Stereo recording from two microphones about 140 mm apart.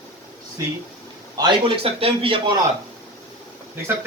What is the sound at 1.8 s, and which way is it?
Speech, 45° right (ahead or behind).